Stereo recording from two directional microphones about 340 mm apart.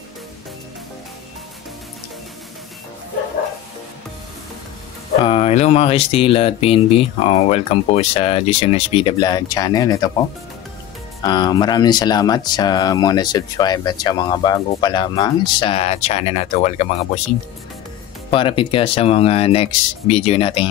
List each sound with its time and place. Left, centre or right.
5.2 s speech: centre
11.2 s speech: centre
18.3 s speech: centre